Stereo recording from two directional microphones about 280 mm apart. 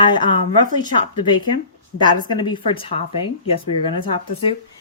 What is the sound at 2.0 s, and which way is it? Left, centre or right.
A woman's voice, centre.